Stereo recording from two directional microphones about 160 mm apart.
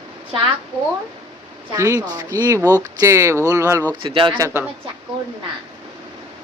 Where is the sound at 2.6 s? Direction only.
10° left (ahead or behind).